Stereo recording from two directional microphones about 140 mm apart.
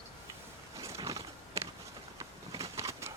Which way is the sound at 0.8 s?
25° right (ahead or behind).